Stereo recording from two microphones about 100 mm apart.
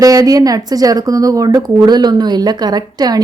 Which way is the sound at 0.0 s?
35° right (ahead or behind).